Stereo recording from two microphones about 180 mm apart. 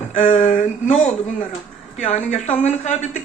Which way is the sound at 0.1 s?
45° left (ahead or behind).